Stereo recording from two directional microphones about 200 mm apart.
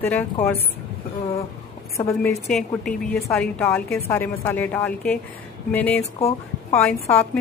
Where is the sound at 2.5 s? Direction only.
Centre (ahead or behind).